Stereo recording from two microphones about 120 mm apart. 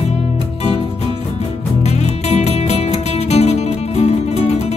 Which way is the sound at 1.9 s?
65° left (ahead or behind).